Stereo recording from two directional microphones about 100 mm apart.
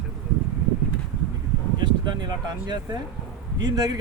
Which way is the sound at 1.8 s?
45° right (ahead or behind).